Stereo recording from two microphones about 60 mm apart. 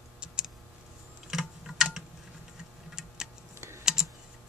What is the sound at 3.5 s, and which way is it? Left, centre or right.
Typing, right.